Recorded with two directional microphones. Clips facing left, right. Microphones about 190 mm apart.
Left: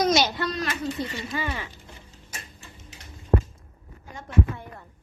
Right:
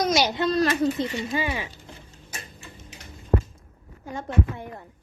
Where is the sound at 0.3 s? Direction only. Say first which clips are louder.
Right 5 dB; 20° right (ahead or behind).